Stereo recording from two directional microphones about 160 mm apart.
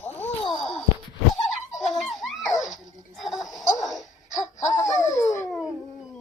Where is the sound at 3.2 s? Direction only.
Centre (ahead or behind).